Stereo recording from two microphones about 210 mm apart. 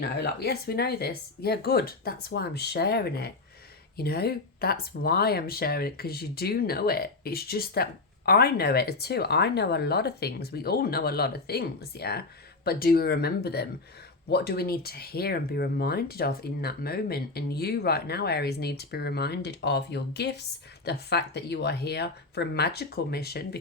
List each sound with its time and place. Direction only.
0.0 s speech: 50° left (ahead or behind)